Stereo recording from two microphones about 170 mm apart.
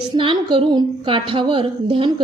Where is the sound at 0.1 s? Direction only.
25° right (ahead or behind).